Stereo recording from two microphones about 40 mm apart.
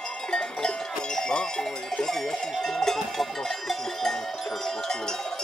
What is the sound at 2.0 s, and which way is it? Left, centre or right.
Cowbell, centre.